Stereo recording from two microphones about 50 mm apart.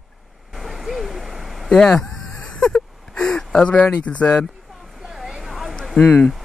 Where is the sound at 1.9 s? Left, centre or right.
Centre.